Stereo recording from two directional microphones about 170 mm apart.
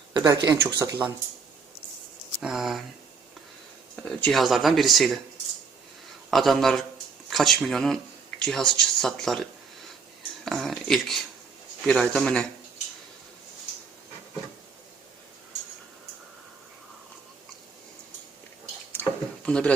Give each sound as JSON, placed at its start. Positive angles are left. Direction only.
{"t": 0.1, "sound": "speech", "side_deg": -25}
{"t": 2.4, "sound": "speech", "side_deg": 0}
{"t": 4.0, "sound": "speech", "side_deg": 5}
{"t": 6.3, "sound": "speech", "side_deg": 0}
{"t": 19.5, "sound": "speech", "side_deg": 5}